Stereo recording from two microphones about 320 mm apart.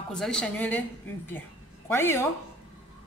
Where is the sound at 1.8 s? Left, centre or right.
Centre.